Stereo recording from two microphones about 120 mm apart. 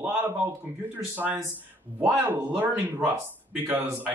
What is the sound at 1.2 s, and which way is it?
Speech, 15° right (ahead or behind).